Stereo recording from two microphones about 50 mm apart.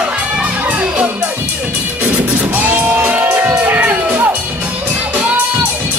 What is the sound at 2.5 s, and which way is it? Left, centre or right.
Music, right.